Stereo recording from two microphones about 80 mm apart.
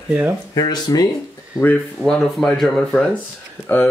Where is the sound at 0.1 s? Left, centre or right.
Right.